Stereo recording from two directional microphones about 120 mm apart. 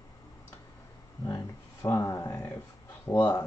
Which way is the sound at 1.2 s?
25° left (ahead or behind).